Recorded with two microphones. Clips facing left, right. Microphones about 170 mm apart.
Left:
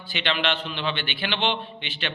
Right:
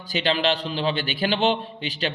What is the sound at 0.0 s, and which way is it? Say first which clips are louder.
A man's voice: right 4 dB; 40° right (ahead or behind).